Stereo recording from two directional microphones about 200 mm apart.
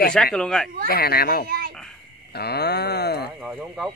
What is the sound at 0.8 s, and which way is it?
Speech, 50° left (ahead or behind).